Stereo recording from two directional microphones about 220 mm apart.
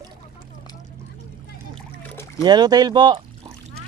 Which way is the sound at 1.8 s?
10° left (ahead or behind).